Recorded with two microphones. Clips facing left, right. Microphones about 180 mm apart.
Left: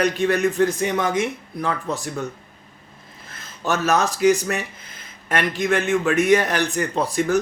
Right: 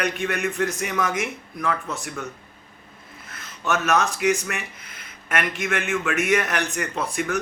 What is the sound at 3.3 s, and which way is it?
A man's voice, 30° left (ahead or behind).